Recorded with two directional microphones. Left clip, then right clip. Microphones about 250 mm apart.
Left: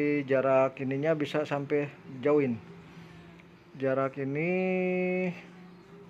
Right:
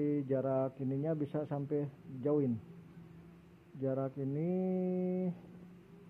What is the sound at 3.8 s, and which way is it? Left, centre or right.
Speech, centre.